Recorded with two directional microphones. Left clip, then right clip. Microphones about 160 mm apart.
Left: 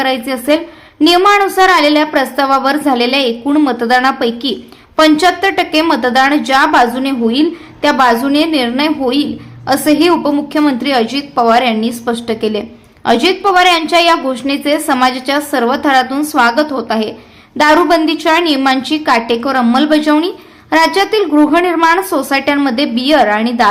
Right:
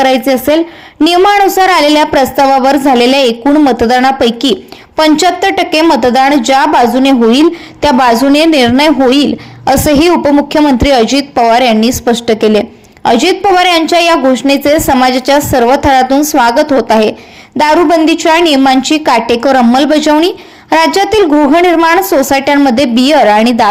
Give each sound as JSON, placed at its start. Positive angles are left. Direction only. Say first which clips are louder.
{"t": 0.0, "sound": "a woman's voice", "louder": "right 7 dB", "side_deg": -40}